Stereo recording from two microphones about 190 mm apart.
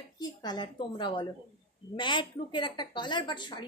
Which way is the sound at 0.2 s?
20° left (ahead or behind).